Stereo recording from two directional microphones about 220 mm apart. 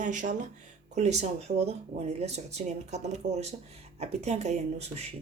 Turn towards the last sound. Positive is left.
turn(degrees=-30)  # may be behind; listen again after turning